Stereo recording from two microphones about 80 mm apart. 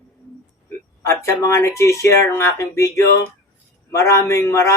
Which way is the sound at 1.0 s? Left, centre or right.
Left.